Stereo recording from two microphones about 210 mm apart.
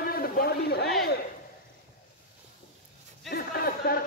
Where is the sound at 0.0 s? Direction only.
45° left (ahead or behind).